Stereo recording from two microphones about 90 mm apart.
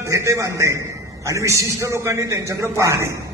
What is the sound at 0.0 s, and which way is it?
A man's voice, 35° right (ahead or behind).